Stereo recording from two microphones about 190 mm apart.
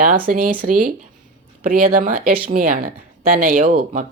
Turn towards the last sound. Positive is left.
turn(degrees=-40)  # may be behind; listen again after turning